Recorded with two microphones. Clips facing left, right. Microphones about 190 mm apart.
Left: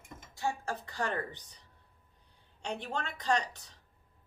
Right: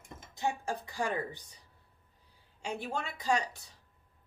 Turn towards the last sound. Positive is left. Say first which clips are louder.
# even
turn(degrees=-10)  # may be behind; listen again after turning